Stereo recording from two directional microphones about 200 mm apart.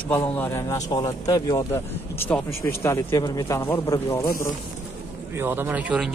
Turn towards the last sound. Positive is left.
turn(degrees=-5)  # may be behind; listen again after turning